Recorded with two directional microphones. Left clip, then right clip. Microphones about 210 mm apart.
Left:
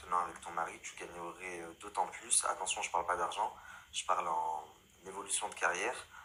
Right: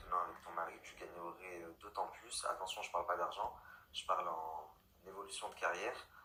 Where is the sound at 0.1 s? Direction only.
40° left (ahead or behind).